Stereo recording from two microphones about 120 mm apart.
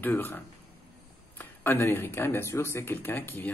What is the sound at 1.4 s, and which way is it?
Speech, 15° left (ahead or behind).